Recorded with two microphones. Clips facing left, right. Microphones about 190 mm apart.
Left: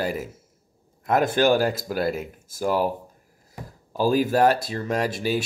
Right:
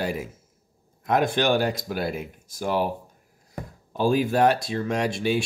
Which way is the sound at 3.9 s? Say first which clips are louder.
Left 1 dB; 5° left (ahead or behind).